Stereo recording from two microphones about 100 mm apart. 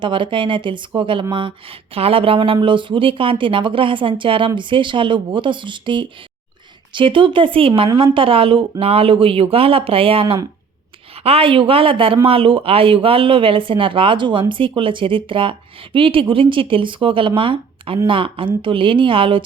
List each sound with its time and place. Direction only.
0.0 s a woman's voice: 55° right (ahead or behind)
11.1 s a woman's voice: 85° right; by 19.4 s 60° right (ahead or behind)